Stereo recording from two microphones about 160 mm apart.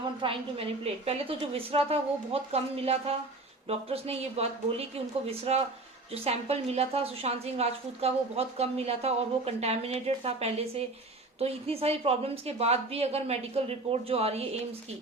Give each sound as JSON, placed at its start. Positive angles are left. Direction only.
{"t": 0.2, "sound": "a woman's voice", "side_deg": -35}